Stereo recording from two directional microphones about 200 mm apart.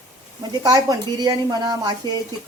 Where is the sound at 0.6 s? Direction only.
20° right (ahead or behind).